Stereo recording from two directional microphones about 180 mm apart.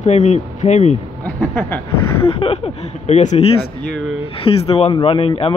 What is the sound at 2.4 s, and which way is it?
Speech, 35° left (ahead or behind).